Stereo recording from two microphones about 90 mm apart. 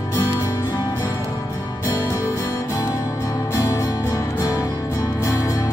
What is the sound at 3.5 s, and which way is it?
Music, 35° left (ahead or behind).